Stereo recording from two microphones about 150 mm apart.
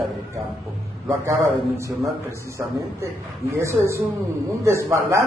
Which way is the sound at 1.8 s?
20° right (ahead or behind).